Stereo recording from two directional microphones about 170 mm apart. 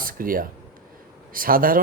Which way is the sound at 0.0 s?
55° right (ahead or behind).